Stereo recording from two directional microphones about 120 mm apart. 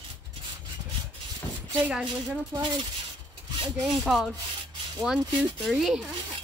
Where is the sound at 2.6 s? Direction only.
35° right (ahead or behind).